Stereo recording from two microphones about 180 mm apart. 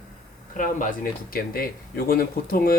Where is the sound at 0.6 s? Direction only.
50° left (ahead or behind).